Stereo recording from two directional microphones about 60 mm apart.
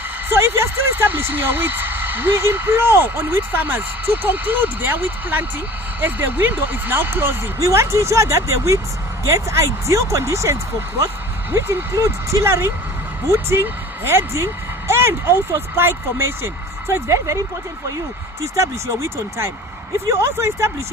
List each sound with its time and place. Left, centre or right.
0.3 s speech: right
7.6 s a woman's voice: right
16.9 s speech: right
18.5 s a woman's voice: right